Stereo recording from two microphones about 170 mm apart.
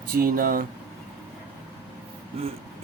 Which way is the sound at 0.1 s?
60° right (ahead or behind).